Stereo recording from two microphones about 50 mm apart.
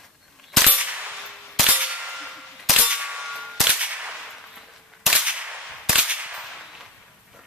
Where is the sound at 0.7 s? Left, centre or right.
Right.